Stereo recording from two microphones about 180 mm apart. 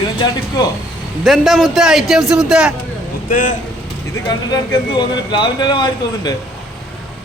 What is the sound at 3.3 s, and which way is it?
Speech, 50° left (ahead or behind).